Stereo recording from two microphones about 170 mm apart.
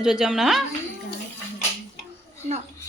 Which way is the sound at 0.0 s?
5° right (ahead or behind).